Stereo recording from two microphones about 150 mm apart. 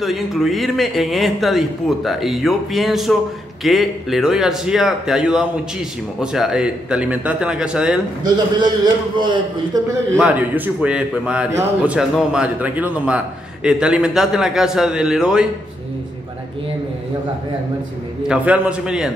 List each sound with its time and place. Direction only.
0.0 s speech: centre (ahead or behind)
8.5 s a man's voice: 30° right (ahead or behind)
10.1 s speech: 10° right (ahead or behind)
18.3 s speech: 10° right (ahead or behind)